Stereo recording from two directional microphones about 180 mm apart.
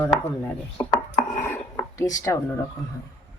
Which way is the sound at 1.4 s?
15° left (ahead or behind).